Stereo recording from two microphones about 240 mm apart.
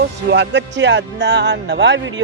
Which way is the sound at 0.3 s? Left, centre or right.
Right.